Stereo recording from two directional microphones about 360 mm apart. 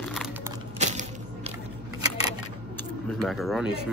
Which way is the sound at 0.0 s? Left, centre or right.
Centre.